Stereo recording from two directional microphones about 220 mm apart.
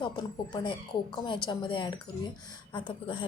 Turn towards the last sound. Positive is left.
turn(degrees=20)  # may be behind; listen again after turning